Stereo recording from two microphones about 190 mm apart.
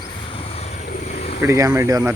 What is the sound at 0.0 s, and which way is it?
Vehicle, 30° left (ahead or behind).